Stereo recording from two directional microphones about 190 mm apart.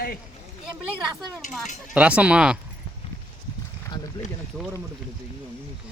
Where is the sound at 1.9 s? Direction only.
5° right (ahead or behind).